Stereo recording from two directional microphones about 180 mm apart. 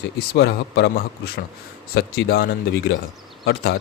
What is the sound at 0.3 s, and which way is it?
A man's voice, 70° left (ahead or behind).